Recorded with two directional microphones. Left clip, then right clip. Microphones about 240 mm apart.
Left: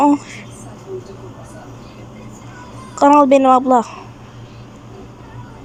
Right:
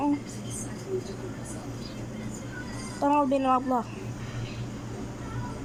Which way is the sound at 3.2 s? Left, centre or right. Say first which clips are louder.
Left 14 dB; left.